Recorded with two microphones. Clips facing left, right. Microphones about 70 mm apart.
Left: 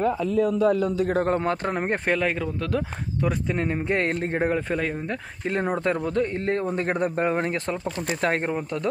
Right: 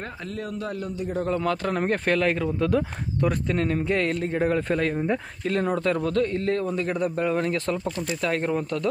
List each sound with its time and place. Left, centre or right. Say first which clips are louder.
1.4 s speech: even; left
1.8 s speech: right 1 dB; centre
2.4 s speech: right 4 dB; centre
3.5 s a man's voice: right 1 dB; left
4.5 s speech: right 1 dB; centre
5.5 s a man's voice: right 1 dB; left